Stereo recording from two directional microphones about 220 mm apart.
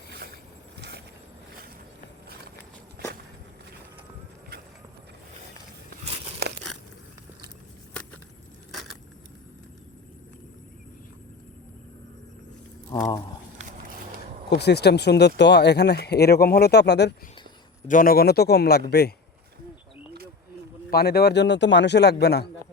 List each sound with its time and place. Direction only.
0.8 s vehicle: 50° right (ahead or behind)
6.4 s biting: 50° right (ahead or behind)
12.9 s a sound: 20° left (ahead or behind)
14.5 s speech: 50° left (ahead or behind)
17.8 s speech: 40° left (ahead or behind)
20.9 s speech: 45° left (ahead or behind)